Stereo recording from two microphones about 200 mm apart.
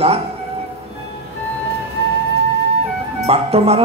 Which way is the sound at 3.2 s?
30° right (ahead or behind).